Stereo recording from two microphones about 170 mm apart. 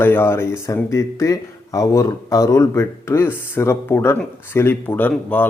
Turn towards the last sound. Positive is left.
turn(degrees=10)  # may be behind; listen again after turning